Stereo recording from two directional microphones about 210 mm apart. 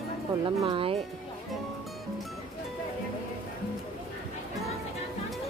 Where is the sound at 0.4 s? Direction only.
25° right (ahead or behind).